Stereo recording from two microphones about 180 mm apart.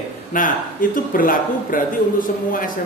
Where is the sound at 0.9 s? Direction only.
50° left (ahead or behind).